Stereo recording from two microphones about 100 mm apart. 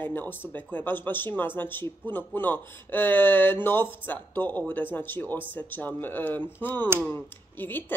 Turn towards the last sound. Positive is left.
turn(degrees=20)  # may be behind; listen again after turning